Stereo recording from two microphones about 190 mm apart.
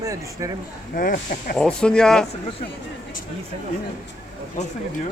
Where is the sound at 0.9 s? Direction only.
45° left (ahead or behind).